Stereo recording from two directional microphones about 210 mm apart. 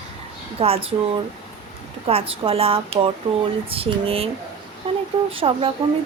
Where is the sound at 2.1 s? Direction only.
25° right (ahead or behind).